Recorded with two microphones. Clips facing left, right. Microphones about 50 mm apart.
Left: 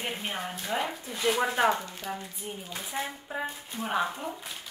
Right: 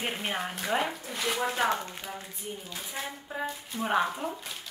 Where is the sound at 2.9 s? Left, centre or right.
Centre.